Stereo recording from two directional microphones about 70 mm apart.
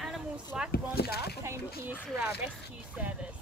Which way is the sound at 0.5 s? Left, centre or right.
Centre.